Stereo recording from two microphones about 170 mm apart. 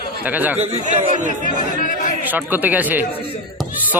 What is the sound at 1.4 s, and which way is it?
Speech, 50° left (ahead or behind).